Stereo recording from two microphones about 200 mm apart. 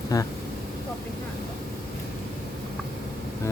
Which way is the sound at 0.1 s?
15° left (ahead or behind).